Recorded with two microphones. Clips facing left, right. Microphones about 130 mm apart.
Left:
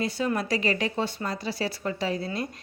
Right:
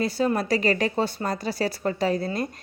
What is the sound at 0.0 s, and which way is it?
Speech, 35° right (ahead or behind).